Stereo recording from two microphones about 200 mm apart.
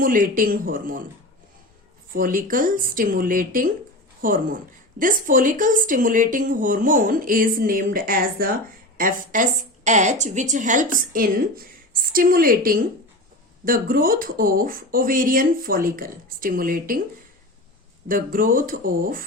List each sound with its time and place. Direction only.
0.0 s a woman's voice: 45° right (ahead or behind)
2.1 s a woman's voice: 45° right (ahead or behind)
18.1 s a woman's voice: 45° right (ahead or behind)